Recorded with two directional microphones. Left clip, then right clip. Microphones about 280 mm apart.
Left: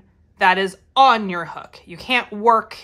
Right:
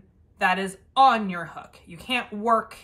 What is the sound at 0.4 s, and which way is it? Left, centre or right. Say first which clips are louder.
Speech: left 7 dB; left.